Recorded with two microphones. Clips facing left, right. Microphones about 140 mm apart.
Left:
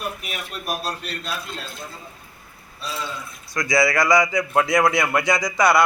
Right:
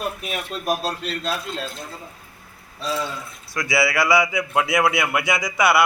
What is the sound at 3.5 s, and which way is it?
A man's voice, 5° right (ahead or behind).